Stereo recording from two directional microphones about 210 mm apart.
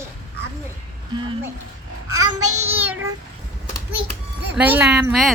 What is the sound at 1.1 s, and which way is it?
Speech, 25° right (ahead or behind).